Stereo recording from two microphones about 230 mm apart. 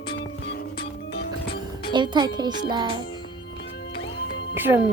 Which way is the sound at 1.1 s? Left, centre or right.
Left.